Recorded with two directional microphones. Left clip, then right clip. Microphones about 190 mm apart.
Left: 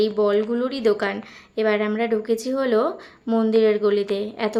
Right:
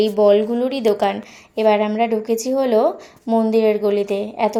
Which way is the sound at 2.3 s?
30° left (ahead or behind).